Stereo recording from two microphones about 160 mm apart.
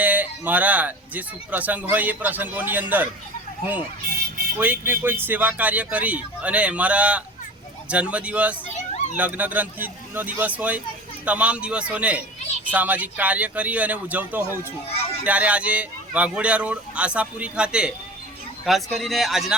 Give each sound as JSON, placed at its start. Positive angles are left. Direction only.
{"t": 0.0, "sound": "speech", "side_deg": -10}
{"t": 4.5, "sound": "speech", "side_deg": -10}
{"t": 14.8, "sound": "a sound", "side_deg": 40}
{"t": 15.2, "sound": "speech", "side_deg": -10}